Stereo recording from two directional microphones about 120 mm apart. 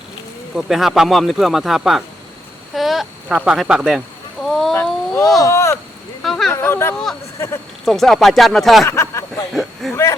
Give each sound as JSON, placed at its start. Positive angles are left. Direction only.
{"t": 0.5, "sound": "speech", "side_deg": -5}
{"t": 4.8, "sound": "a sound", "side_deg": 30}
{"t": 5.5, "sound": "speech", "side_deg": 25}
{"t": 6.2, "sound": "speech", "side_deg": 0}
{"t": 6.5, "sound": "speech", "side_deg": 20}
{"t": 6.9, "sound": "speech", "side_deg": 0}
{"t": 7.3, "sound": "speech", "side_deg": 25}
{"t": 7.9, "sound": "speech", "side_deg": 0}
{"t": 8.9, "sound": "a sound", "side_deg": 25}
{"t": 9.9, "sound": "speech", "side_deg": 25}